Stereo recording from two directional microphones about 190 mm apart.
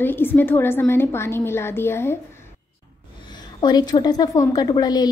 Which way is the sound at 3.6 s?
20° left (ahead or behind).